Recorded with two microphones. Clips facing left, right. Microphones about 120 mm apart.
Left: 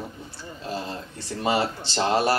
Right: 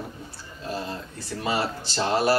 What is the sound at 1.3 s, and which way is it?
Speech, 25° left (ahead or behind).